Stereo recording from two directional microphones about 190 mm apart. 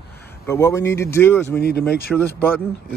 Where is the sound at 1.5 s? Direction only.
60° left (ahead or behind).